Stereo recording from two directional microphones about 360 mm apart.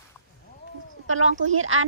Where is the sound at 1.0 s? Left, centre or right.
Right.